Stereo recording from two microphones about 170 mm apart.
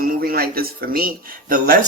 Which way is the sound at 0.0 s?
60° right (ahead or behind).